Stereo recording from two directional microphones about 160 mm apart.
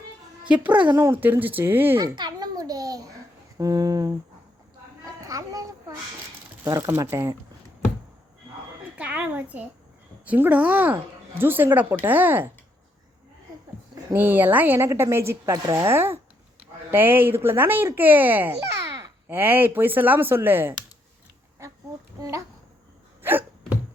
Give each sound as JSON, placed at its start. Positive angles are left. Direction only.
{"t": 0.4, "sound": "a woman's voice", "side_deg": -10}
{"t": 2.0, "sound": "babbling", "side_deg": -25}
{"t": 3.6, "sound": "speech", "side_deg": -20}
{"t": 5.0, "sound": "a sound", "side_deg": -20}
{"t": 6.7, "sound": "speech", "side_deg": -20}
{"t": 9.0, "sound": "a sound", "side_deg": -10}
{"t": 10.2, "sound": "a woman's voice", "side_deg": -10}
{"t": 14.1, "sound": "a woman's voice", "side_deg": -10}
{"t": 22.2, "sound": "speech", "side_deg": -20}
{"t": 23.2, "sound": "hiccup", "side_deg": -10}